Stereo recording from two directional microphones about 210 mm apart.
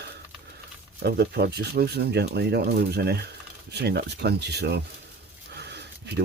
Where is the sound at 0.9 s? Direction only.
50° right (ahead or behind).